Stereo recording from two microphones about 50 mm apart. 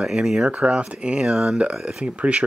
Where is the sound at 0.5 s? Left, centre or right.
Right.